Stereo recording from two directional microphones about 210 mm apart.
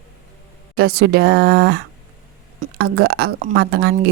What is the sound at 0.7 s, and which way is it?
Speech, 45° right (ahead or behind).